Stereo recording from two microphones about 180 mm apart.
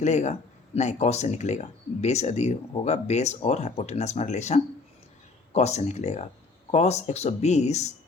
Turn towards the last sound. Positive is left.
turn(degrees=40)  # may be behind; listen again after turning